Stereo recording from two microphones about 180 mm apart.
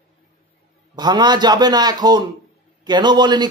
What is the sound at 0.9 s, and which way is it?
A man's voice, 25° right (ahead or behind).